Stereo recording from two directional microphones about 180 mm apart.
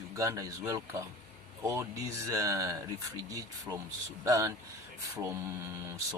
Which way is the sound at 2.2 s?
20° right (ahead or behind).